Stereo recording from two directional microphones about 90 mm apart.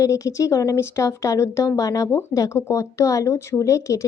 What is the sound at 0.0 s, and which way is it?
A woman's voice, 35° left (ahead or behind).